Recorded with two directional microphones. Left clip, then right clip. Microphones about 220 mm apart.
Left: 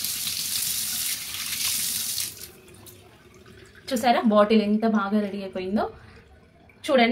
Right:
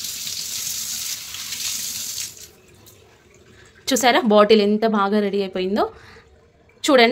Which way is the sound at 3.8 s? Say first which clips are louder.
Right 5 dB; 50° right (ahead or behind).